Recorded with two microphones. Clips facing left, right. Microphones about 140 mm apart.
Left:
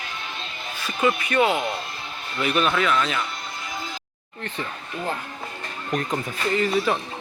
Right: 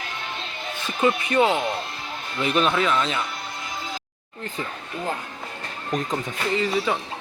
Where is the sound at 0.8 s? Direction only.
20° right (ahead or behind).